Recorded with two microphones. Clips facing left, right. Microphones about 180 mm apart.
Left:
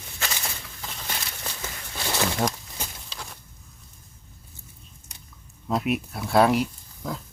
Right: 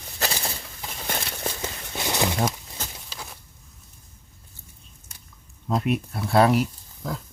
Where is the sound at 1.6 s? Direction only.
20° right (ahead or behind).